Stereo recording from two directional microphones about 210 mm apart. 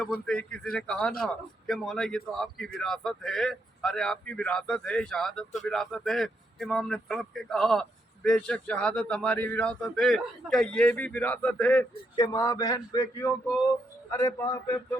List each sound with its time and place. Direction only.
0.0 s a man's voice: 5° left (ahead or behind)